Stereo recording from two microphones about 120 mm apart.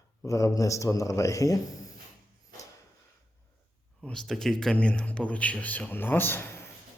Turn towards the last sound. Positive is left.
turn(degrees=20)  # may be behind; listen again after turning